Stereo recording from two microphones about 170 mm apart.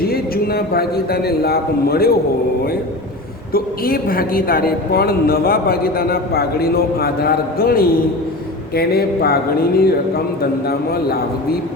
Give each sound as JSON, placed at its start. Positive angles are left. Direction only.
{"t": 0.1, "sound": "a woman's voice", "side_deg": 65}
{"t": 3.5, "sound": "a woman's voice", "side_deg": 60}